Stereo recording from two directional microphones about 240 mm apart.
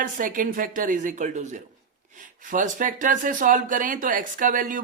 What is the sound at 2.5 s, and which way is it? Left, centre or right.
Speech, right.